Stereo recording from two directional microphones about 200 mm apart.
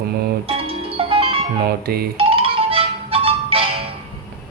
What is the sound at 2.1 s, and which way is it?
Music, 30° right (ahead or behind).